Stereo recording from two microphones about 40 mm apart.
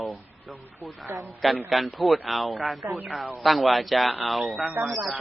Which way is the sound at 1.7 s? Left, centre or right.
Centre.